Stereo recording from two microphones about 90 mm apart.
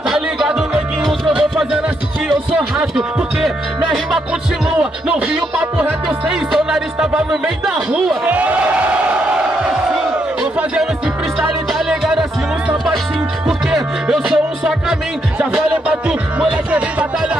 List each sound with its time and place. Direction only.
0.1 s music: 5° right (ahead or behind)
4.6 s music: 15° right (ahead or behind)
8.3 s a sound: 15° right (ahead or behind)
10.4 s music: 5° right (ahead or behind)
13.5 s music: 10° right (ahead or behind)